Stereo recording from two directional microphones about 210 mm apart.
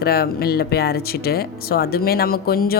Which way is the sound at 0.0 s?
45° left (ahead or behind).